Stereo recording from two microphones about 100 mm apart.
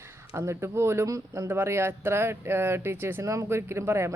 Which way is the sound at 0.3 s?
25° right (ahead or behind).